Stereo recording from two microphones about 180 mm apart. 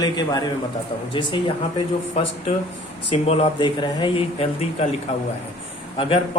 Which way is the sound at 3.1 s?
35° left (ahead or behind).